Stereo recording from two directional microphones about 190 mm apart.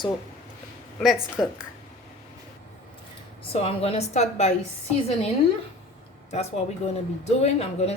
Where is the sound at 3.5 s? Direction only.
30° left (ahead or behind).